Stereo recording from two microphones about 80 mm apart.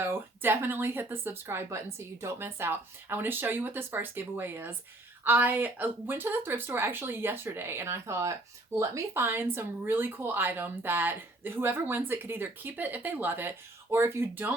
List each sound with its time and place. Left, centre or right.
0.1 s speech: right